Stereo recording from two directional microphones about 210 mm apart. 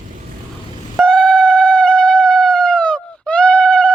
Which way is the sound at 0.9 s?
5° left (ahead or behind).